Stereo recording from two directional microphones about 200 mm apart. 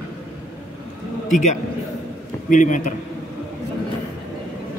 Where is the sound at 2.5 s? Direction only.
40° left (ahead or behind).